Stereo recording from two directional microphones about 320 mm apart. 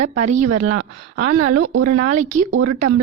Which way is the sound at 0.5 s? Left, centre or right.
Right.